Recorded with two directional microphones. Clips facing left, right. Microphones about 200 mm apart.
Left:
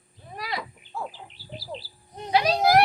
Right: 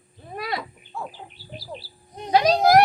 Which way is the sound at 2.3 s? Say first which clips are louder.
Right 4 dB; 40° right (ahead or behind).